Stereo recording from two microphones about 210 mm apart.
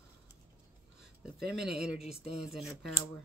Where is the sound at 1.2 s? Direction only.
Centre (ahead or behind).